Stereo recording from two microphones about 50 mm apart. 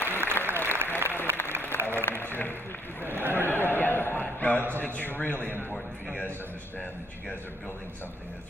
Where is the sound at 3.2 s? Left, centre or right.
Right.